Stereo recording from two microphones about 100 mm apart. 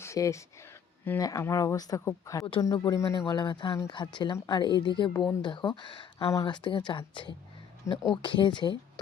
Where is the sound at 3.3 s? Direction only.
45° left (ahead or behind).